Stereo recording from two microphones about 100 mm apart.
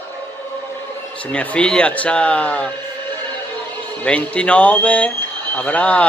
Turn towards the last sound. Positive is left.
turn(degrees=15)  # may be behind; listen again after turning